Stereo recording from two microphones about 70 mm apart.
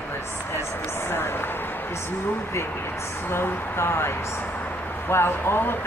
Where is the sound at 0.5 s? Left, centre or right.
Left.